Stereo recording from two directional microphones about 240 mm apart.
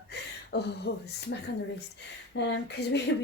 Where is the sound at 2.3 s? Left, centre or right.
Left.